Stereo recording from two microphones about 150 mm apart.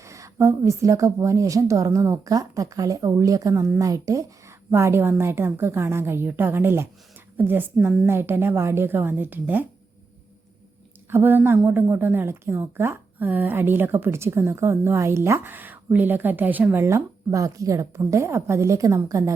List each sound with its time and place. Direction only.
0.0 s a woman's voice: 20° right (ahead or behind)
11.1 s a woman's voice: 15° right (ahead or behind)